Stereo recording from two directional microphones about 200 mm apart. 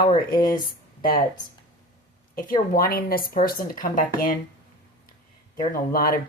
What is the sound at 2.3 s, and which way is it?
Speech, 45° left (ahead or behind).